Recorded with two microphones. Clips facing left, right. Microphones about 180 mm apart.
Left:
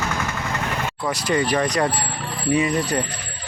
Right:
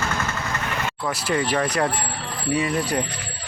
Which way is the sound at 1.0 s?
5° right (ahead or behind).